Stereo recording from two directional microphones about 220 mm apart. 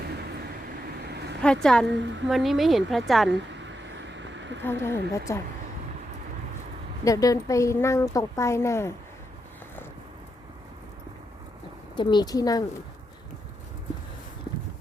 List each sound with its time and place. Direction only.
1.0 s vehicle: 50° right (ahead or behind)
1.6 s speech: centre (ahead or behind)
1.9 s a woman's voice: 55° right (ahead or behind)
2.3 s speech: centre (ahead or behind)
3.2 s a sound: 55° right (ahead or behind)
4.6 s a woman's voice: 10° left (ahead or behind)
7.0 s a woman's voice: 15° left (ahead or behind)
11.9 s a woman's voice: 20° left (ahead or behind)